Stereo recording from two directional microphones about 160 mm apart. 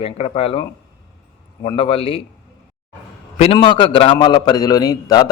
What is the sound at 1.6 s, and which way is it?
Speech, 35° left (ahead or behind).